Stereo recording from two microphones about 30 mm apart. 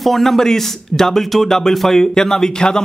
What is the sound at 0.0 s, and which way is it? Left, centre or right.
A man's voice, centre.